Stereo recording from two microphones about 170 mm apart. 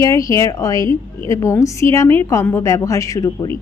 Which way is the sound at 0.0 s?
20° left (ahead or behind).